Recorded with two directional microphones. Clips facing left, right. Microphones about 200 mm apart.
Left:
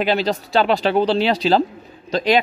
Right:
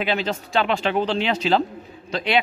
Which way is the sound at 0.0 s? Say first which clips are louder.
Left 5 dB; 35° left (ahead or behind).